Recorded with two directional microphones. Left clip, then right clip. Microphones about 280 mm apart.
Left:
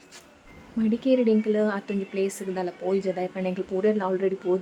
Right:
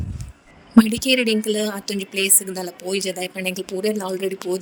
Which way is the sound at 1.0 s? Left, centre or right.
Right.